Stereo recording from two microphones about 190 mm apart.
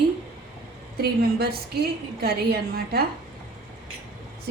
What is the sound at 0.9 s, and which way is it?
A woman's voice, 55° right (ahead or behind).